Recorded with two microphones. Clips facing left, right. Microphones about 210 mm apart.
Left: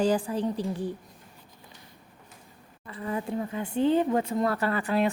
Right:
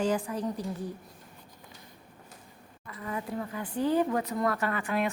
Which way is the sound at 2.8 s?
30° left (ahead or behind).